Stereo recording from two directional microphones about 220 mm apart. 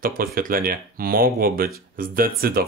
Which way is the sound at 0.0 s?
40° right (ahead or behind).